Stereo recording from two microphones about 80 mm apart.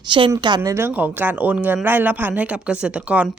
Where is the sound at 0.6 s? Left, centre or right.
Right.